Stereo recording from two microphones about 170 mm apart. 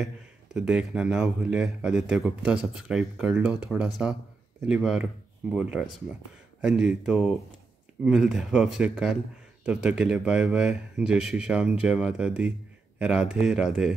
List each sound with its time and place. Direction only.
0.6 s speech: 5° right (ahead or behind)